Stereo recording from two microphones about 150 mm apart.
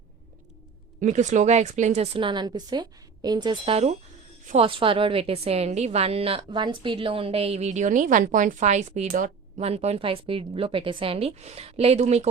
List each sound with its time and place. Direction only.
1.0 s a woman's voice: 50° right (ahead or behind)